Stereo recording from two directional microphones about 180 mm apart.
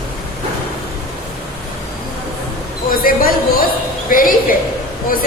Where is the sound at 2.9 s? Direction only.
50° left (ahead or behind).